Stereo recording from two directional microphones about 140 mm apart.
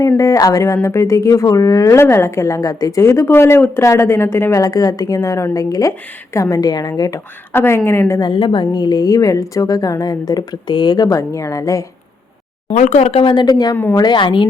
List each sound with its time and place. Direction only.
0.2 s speech: 25° left (ahead or behind)
7.5 s a woman's voice: 15° left (ahead or behind)
8.2 s speech: 35° left (ahead or behind)
12.6 s a woman's voice: 60° left (ahead or behind); by 14.4 s 35° left (ahead or behind)